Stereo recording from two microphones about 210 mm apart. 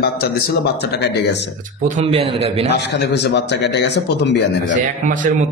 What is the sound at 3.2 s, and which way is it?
Speech, 55° left (ahead or behind).